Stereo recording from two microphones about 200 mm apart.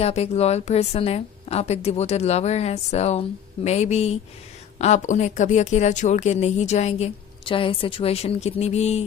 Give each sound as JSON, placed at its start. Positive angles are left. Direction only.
{"t": 0.0, "sound": "a woman's voice", "side_deg": 30}